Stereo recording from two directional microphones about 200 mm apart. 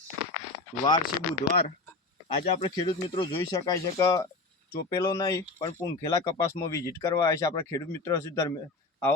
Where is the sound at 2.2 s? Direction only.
30° left (ahead or behind).